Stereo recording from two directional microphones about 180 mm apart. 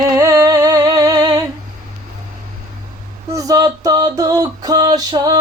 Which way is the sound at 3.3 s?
20° right (ahead or behind).